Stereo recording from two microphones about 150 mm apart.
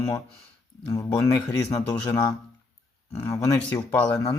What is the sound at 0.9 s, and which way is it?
Speech, 20° left (ahead or behind).